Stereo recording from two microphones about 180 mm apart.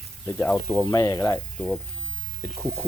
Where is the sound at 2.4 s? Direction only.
10° left (ahead or behind).